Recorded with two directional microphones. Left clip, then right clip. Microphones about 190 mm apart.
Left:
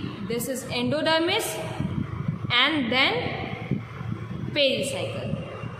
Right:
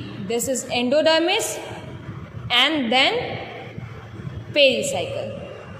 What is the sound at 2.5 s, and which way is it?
Speech, 20° right (ahead or behind).